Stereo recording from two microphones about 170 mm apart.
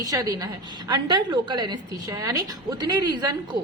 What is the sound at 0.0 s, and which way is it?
A woman's voice, 20° right (ahead or behind).